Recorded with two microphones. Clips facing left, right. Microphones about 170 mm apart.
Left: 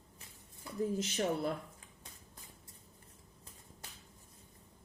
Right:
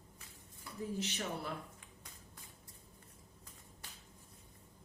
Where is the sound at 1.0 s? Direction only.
40° left (ahead or behind).